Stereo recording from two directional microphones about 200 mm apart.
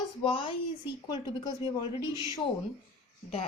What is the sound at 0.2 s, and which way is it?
Speech, 25° left (ahead or behind).